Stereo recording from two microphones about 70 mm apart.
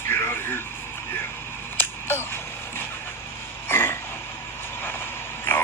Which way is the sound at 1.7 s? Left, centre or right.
Left.